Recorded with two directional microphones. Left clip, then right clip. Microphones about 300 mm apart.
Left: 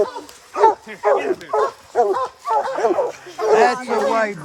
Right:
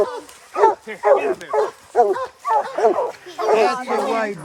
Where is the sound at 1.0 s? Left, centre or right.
Right.